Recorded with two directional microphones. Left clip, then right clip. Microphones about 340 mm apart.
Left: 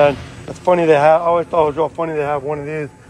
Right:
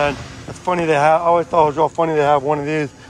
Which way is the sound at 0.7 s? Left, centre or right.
Centre.